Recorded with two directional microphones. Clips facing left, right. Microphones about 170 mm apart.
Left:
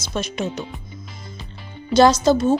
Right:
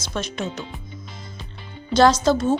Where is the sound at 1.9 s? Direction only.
10° left (ahead or behind).